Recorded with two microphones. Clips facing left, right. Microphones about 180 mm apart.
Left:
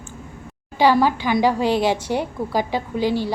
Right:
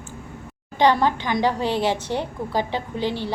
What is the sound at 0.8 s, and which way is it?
A woman's voice, 10° left (ahead or behind).